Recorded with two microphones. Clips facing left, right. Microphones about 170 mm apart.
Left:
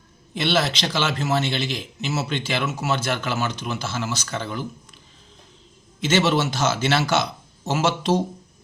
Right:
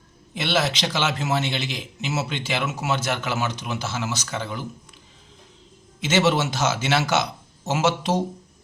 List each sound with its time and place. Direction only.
0.3 s a man's voice: 15° right (ahead or behind)
6.1 s a man's voice: 15° right (ahead or behind)